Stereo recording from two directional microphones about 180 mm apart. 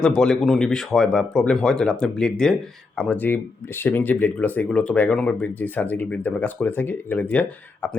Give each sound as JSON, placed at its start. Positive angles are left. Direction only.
{"t": 0.0, "sound": "speech", "side_deg": 5}